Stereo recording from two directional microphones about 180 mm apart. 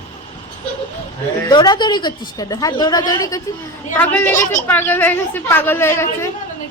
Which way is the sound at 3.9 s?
10° left (ahead or behind).